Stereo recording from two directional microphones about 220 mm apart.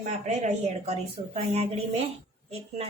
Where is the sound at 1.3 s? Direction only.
30° right (ahead or behind).